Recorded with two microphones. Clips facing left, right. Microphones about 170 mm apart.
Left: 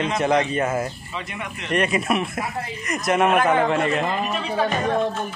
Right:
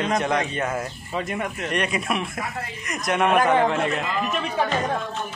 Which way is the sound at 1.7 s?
Centre (ahead or behind).